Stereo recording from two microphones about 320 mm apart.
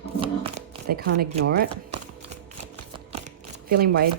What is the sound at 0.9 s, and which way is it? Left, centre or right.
Speech, right.